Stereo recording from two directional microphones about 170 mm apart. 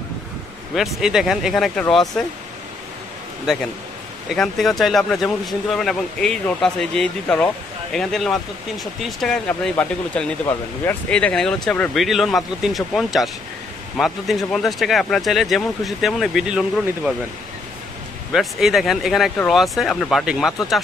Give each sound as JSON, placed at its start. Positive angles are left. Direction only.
{"t": 0.7, "sound": "speech", "side_deg": 0}
{"t": 4.3, "sound": "speech", "side_deg": 0}
{"t": 18.3, "sound": "speech", "side_deg": 0}